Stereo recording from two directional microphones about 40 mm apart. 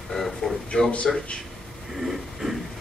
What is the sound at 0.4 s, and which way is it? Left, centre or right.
Speech, centre.